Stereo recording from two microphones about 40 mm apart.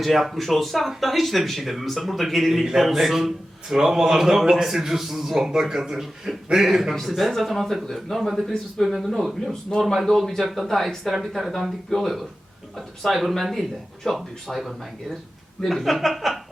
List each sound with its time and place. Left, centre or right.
0.0 s a man's voice: centre
9.5 s speech: centre
9.8 s speech: centre
10.4 s a man's voice: centre
10.7 s speech: centre